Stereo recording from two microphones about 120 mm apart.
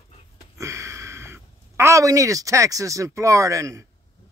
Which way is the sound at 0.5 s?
25° right (ahead or behind).